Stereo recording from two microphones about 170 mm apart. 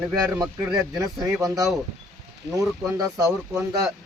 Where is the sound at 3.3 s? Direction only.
5° right (ahead or behind).